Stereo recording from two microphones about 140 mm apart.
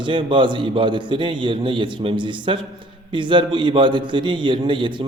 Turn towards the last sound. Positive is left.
turn(degrees=-35)  # may be behind; listen again after turning